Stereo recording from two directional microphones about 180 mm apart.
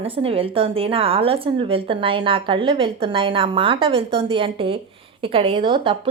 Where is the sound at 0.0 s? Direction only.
30° right (ahead or behind).